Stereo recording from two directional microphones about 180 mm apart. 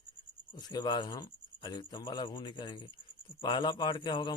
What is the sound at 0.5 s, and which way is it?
A man's voice, 20° left (ahead or behind).